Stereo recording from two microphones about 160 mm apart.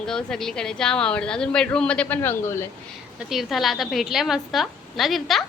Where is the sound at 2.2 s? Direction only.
15° left (ahead or behind).